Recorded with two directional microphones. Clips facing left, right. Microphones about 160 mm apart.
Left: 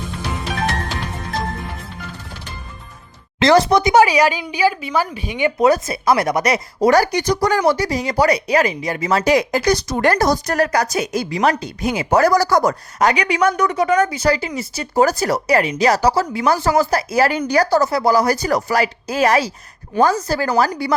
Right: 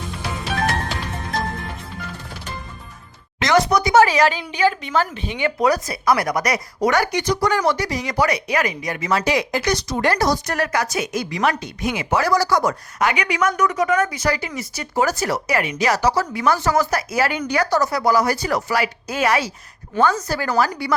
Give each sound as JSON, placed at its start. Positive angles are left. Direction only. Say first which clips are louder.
{"t": 3.4, "sound": "a woman's voice", "louder": "left 4 dB", "side_deg": 30}
{"t": 3.9, "sound": "a woman's voice", "louder": "right 1 dB", "side_deg": 15}
{"t": 10.0, "sound": "speech", "louder": "left 2 dB", "side_deg": 50}
{"t": 10.4, "sound": "speech", "louder": "left 4 dB", "side_deg": 35}